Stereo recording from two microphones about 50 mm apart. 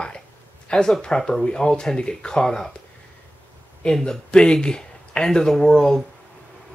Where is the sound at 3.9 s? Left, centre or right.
Centre.